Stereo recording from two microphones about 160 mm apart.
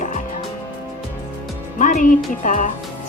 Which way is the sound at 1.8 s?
55° left (ahead or behind).